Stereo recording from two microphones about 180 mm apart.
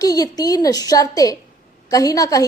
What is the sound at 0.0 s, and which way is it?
A woman's voice, 20° left (ahead or behind).